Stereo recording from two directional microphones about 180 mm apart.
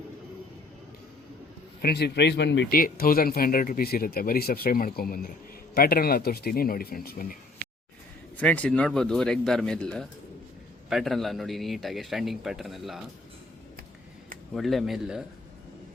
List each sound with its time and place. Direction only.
1.8 s speech: 65° left (ahead or behind)
8.4 s a man's voice: 5° left (ahead or behind)
14.5 s a man's voice: centre (ahead or behind)